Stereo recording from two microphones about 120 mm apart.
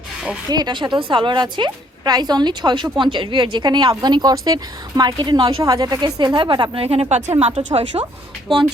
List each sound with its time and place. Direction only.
0.4 s speech: 35° right (ahead or behind)
5.6 s speech: 30° right (ahead or behind); by 7.6 s 70° right (ahead or behind)
7.7 s speech: 45° right (ahead or behind)